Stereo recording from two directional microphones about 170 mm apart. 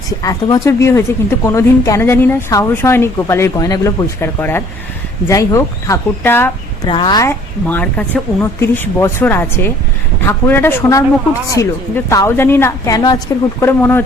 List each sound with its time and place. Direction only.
0.2 s a woman's voice: 20° left (ahead or behind)
6.8 s a woman's voice: 25° left (ahead or behind)